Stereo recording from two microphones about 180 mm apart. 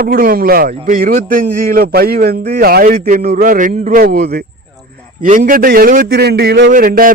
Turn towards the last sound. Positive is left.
turn(degrees=-50)  # may be behind; listen again after turning